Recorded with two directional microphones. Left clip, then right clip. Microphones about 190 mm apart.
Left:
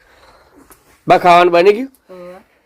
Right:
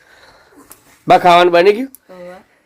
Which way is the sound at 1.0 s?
Centre (ahead or behind).